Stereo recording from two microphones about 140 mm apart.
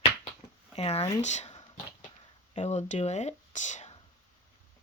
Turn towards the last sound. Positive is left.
turn(degrees=55)  # may be behind; listen again after turning